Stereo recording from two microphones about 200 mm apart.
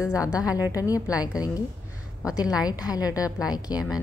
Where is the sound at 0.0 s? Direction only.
15° left (ahead or behind).